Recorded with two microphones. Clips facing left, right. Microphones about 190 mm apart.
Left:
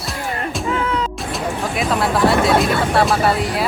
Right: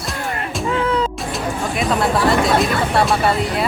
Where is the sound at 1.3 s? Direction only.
Centre (ahead or behind).